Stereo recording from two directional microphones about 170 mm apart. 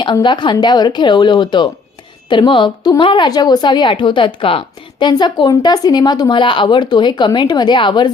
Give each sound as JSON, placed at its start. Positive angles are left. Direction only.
{"t": 0.0, "sound": "speech", "side_deg": 30}